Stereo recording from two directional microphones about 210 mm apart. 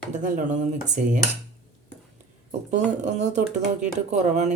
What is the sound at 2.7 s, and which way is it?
Speech, 35° right (ahead or behind).